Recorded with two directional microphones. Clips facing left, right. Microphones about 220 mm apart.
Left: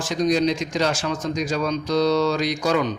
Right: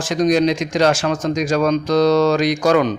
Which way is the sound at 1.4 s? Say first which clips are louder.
Right 8 dB; 90° right.